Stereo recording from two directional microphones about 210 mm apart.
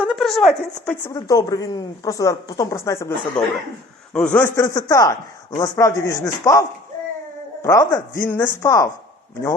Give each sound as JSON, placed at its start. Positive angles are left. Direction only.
{"t": 0.0, "sound": "speech", "side_deg": 0}
{"t": 1.1, "sound": "speech", "side_deg": 15}